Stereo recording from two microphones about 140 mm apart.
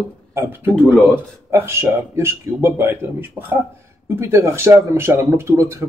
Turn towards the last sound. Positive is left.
turn(degrees=-20)  # may be behind; listen again after turning